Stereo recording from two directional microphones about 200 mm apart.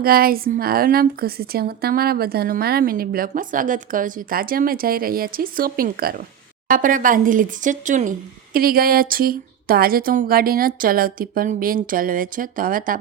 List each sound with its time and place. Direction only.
0.0 s a woman's voice: 50° right (ahead or behind)